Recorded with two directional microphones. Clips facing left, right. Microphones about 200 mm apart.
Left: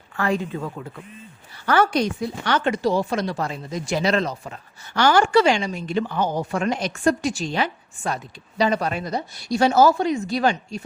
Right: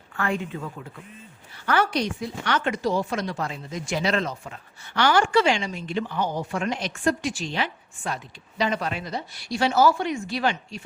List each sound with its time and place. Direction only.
0.2 s speech: 35° left (ahead or behind)
1.6 s speech: 50° left (ahead or behind)